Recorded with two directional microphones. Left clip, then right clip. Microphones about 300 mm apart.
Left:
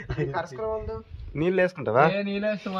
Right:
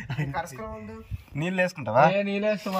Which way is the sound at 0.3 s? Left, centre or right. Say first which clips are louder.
Left 2 dB; left.